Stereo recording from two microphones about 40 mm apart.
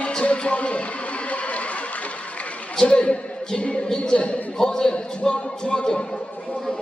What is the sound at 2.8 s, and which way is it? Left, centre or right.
Speech, left.